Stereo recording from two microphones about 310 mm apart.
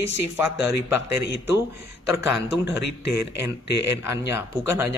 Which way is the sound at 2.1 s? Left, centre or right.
Centre.